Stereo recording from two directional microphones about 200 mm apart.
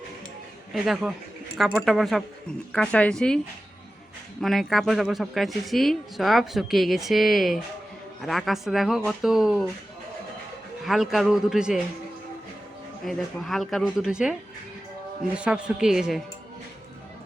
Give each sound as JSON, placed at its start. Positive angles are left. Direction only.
{"t": 0.7, "sound": "a woman's voice", "side_deg": 0}
{"t": 10.8, "sound": "a woman's voice", "side_deg": 0}
{"t": 13.1, "sound": "a woman's voice", "side_deg": 0}
{"t": 15.4, "sound": "a woman's voice", "side_deg": -5}